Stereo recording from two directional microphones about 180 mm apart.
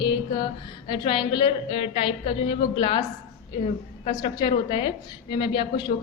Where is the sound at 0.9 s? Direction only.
25° left (ahead or behind).